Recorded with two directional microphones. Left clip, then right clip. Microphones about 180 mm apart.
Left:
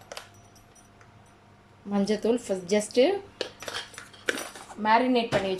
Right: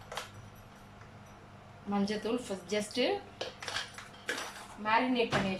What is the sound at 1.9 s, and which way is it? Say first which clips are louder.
Speech: left 8 dB; 35° left (ahead or behind).